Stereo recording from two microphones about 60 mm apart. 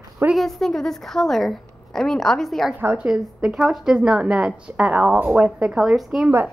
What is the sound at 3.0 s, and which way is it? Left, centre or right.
Speech, centre.